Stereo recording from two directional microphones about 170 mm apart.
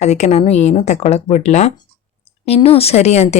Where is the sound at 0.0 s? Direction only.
40° left (ahead or behind).